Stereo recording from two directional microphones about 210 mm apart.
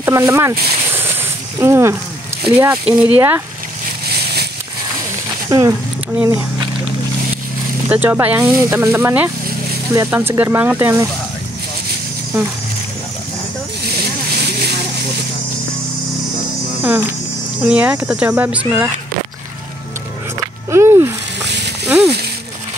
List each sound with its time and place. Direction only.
0.0 s speech: 10° right (ahead or behind)
4.1 s a sound: 50° right (ahead or behind)
5.5 s speech: 15° right (ahead or behind)
7.9 s speech: 10° right (ahead or behind)
16.8 s speech: 10° right (ahead or behind)
20.7 s a sound: 10° right (ahead or behind)